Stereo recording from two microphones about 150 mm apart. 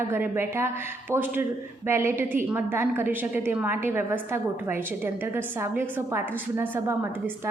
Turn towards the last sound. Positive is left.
turn(degrees=-15)  # may be behind; listen again after turning